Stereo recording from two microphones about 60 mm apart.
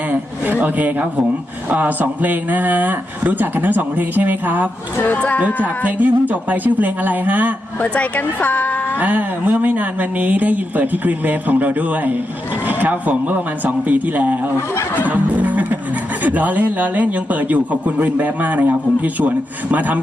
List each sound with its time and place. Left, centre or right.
0.1 s a man's voice: right
4.9 s speech: left
5.6 s speech: right
7.8 s speech: left
9.0 s speech: right
15.0 s music: right
16.2 s speech: right